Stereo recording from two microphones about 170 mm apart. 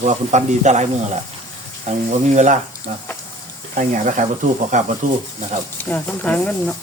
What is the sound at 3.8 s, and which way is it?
Speech, 50° right (ahead or behind).